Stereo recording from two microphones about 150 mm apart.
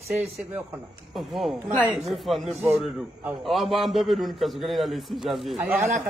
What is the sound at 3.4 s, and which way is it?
A man's voice, centre (ahead or behind).